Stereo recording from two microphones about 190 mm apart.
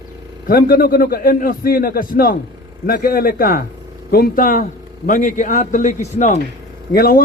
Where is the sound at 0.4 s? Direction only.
50° left (ahead or behind).